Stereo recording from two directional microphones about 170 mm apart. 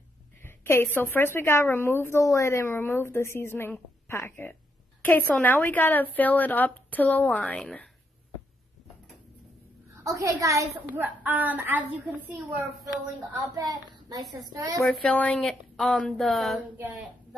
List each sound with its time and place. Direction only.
0.4 s a woman's voice: 15° left (ahead or behind)
10.0 s a woman's voice: 20° right (ahead or behind)
13.6 s a woman's voice: 25° right (ahead or behind)
14.9 s speech: 5° left (ahead or behind)